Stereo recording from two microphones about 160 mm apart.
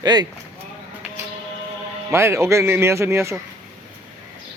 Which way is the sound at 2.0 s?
15° right (ahead or behind).